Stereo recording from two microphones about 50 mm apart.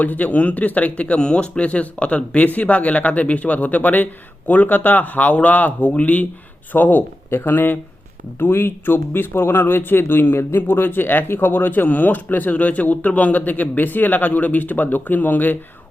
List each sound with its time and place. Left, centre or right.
0.0 s speech: left
7.3 s speech: left